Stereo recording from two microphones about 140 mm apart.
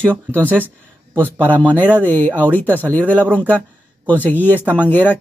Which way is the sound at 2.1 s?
15° left (ahead or behind).